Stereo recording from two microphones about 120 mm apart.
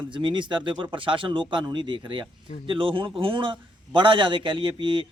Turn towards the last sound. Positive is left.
turn(degrees=-45)  # may be behind; listen again after turning